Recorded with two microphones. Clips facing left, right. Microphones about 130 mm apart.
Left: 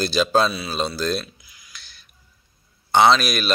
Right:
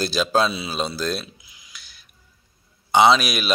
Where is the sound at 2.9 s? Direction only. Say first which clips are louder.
Even; 5° right (ahead or behind).